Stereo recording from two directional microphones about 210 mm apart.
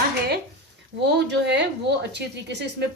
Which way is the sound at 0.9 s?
55° right (ahead or behind).